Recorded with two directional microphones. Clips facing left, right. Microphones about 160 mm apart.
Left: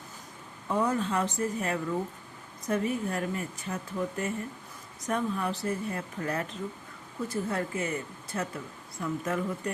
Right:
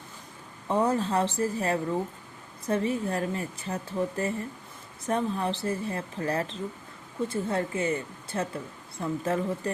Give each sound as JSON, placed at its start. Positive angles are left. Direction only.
{"t": 0.7, "sound": "speech", "side_deg": -30}